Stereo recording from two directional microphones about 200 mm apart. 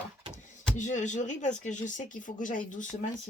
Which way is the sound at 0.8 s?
40° left (ahead or behind).